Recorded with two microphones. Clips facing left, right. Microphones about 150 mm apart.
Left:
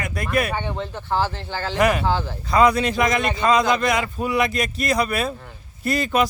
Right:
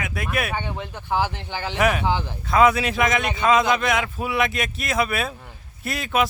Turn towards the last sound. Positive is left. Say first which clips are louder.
# left 3 dB
turn(degrees=0)  # may be behind; listen again after turning